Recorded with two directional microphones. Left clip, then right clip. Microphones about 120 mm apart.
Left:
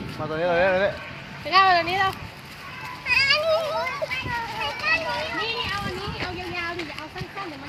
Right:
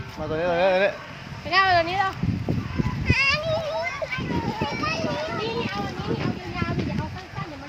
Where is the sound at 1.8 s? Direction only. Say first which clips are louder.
Left 1 dB; 30° right (ahead or behind).